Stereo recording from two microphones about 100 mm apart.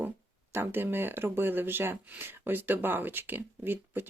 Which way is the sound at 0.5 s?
20° right (ahead or behind).